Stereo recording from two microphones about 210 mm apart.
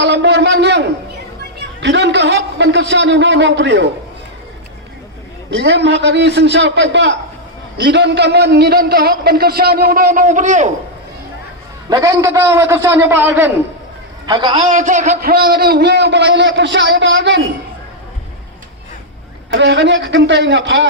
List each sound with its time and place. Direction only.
0.0 s a sound: 55° right (ahead or behind)
1.5 s a man's voice: 55° right (ahead or behind)
5.5 s a man's voice: 55° right (ahead or behind); by 10.7 s 35° right (ahead or behind)
11.9 s a man's voice: 15° right (ahead or behind)
14.3 s a man's voice: 20° right (ahead or behind)
14.6 s a man's voice: 35° right (ahead or behind); by 17.4 s 60° right (ahead or behind)
19.5 s a man's voice: 60° right (ahead or behind)